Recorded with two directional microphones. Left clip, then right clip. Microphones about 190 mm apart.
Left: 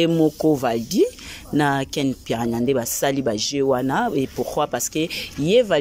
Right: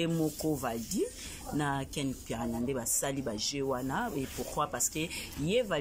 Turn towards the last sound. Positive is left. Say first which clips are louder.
# left 13 dB
turn(degrees=45)  # may be behind; listen again after turning